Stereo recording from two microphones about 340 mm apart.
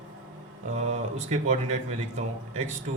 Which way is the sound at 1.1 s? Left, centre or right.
Centre.